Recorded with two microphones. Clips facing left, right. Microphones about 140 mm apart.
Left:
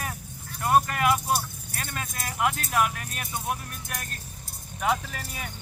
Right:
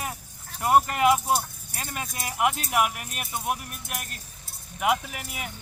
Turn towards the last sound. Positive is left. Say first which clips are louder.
# even
turn(degrees=-10)  # may be behind; listen again after turning